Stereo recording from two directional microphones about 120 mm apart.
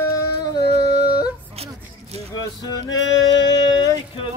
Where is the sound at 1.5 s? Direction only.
60° right (ahead or behind).